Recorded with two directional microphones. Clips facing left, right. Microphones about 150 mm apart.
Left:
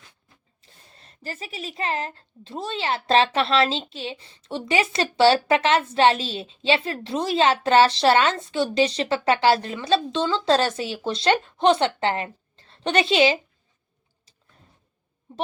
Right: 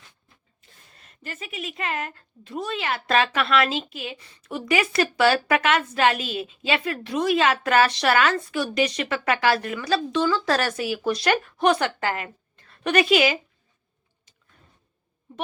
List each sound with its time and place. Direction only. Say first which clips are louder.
0.6 s speech: left 2 dB; 35° left (ahead or behind)